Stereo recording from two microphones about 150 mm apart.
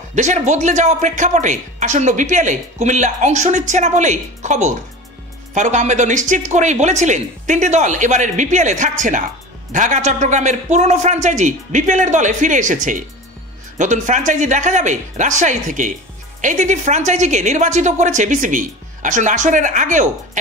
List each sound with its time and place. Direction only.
0.1 s a woman's voice: 50° right (ahead or behind)